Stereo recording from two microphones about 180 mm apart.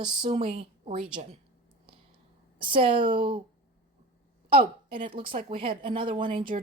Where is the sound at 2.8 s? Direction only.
30° right (ahead or behind).